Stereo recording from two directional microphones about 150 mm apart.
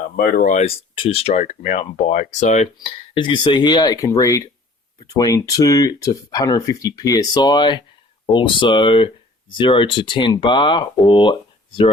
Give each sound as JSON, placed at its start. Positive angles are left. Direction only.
{"t": 0.0, "sound": "speech", "side_deg": 70}
{"t": 0.6, "sound": "speech", "side_deg": 40}
{"t": 2.8, "sound": "speech", "side_deg": 35}